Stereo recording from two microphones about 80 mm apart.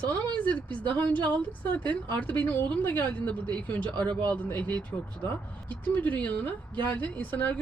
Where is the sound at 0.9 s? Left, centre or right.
Left.